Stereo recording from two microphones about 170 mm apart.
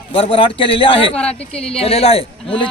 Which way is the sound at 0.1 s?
30° left (ahead or behind).